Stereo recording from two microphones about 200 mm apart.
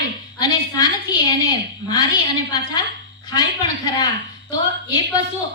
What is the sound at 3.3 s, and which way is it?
Speech, 20° left (ahead or behind).